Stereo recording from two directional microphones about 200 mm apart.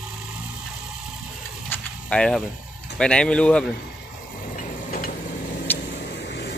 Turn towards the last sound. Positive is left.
turn(degrees=10)  # may be behind; listen again after turning